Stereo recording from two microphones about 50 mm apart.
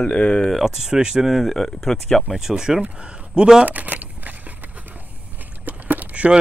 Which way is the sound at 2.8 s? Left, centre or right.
Right.